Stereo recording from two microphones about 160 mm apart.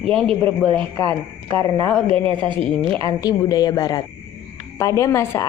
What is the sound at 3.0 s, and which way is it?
A woman's voice, 20° left (ahead or behind).